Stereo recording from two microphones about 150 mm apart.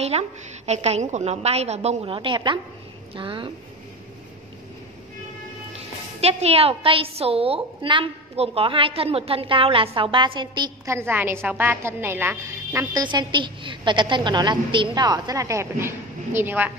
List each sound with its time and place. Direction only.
0.1 s a woman's voice: 40° right (ahead or behind)
6.2 s a woman's voice: 40° right (ahead or behind)
10.9 s a woman's voice: 15° right (ahead or behind)